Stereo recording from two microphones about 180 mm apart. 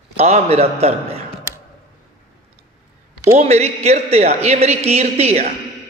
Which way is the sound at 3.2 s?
40° right (ahead or behind).